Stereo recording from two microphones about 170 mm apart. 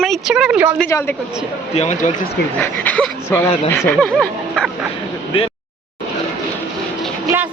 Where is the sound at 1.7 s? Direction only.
45° left (ahead or behind).